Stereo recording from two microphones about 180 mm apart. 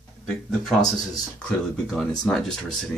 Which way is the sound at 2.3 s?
5° left (ahead or behind).